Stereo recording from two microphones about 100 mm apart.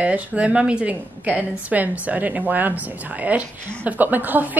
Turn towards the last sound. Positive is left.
turn(degrees=-15)  # may be behind; listen again after turning